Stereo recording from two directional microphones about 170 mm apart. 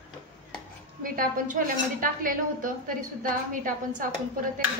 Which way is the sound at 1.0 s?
55° right (ahead or behind).